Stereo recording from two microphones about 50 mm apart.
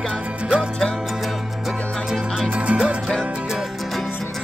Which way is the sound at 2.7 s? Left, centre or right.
Right.